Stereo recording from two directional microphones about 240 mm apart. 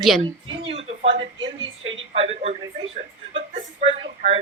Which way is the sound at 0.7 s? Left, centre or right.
Right.